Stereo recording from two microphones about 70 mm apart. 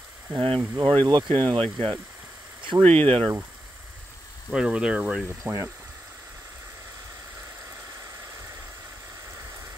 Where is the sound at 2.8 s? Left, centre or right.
Left.